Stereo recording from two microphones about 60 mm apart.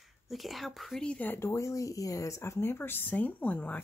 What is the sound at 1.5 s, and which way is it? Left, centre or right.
Speech, left.